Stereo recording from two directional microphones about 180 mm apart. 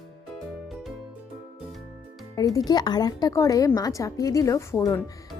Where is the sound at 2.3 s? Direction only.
20° left (ahead or behind).